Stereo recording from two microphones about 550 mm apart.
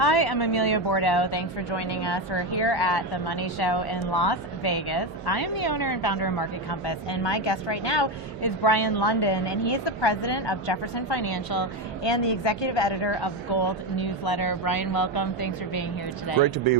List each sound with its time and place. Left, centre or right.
0.0 s a woman's voice: left